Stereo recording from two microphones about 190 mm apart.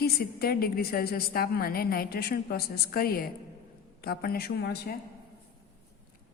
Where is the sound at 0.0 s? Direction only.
55° left (ahead or behind).